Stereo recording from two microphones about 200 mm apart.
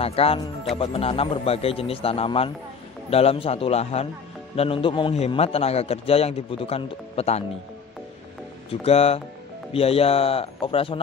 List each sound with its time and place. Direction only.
0.0 s a man's voice: 30° left (ahead or behind)
8.8 s a man's voice: 30° left (ahead or behind)